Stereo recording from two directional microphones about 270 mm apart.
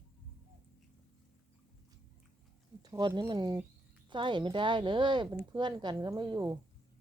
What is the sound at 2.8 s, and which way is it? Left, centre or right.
Speech, centre.